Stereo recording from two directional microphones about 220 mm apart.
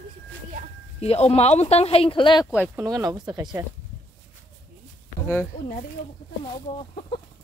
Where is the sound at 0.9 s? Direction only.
30° left (ahead or behind).